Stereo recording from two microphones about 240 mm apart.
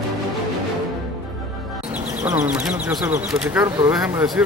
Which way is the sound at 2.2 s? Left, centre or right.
Centre.